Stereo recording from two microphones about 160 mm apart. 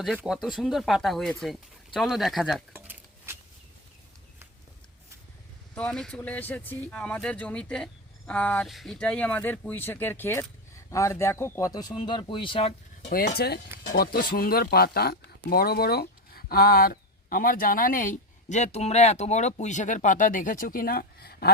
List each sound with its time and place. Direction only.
0.2 s speech: centre (ahead or behind)
2.7 s a sound: 10° right (ahead or behind)
5.7 s speech: 5° left (ahead or behind); by 13.1 s 35° left (ahead or behind)
13.1 s speech: 65° left (ahead or behind)
13.9 s speech: 70° left (ahead or behind)